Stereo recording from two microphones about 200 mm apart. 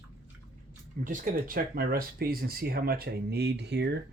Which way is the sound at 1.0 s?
40° right (ahead or behind).